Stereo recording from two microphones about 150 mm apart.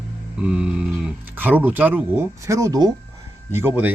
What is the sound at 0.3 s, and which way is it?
Speech, 10° right (ahead or behind).